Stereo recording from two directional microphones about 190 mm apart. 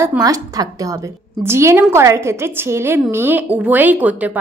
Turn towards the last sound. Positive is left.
turn(degrees=-10)  # may be behind; listen again after turning